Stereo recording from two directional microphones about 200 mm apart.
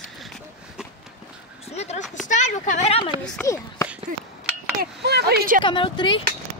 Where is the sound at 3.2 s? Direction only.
10° left (ahead or behind).